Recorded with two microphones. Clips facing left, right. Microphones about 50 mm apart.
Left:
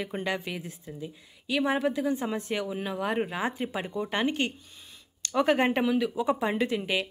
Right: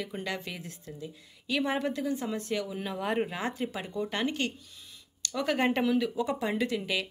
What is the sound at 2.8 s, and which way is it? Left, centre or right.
Speech, centre.